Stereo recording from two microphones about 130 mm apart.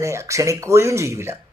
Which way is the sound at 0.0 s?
20° right (ahead or behind).